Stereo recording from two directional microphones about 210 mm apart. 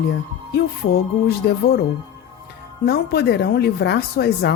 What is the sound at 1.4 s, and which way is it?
Speech, 55° left (ahead or behind).